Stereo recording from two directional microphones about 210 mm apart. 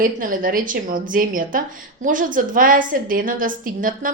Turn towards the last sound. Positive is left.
turn(degrees=-40)  # may be behind; listen again after turning